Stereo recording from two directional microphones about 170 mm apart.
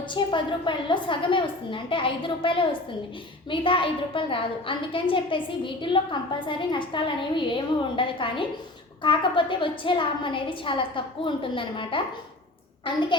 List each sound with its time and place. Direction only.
0.1 s a woman's voice: 30° left (ahead or behind)